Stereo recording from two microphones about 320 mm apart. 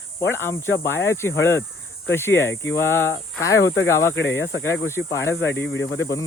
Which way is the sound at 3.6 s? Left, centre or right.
Left.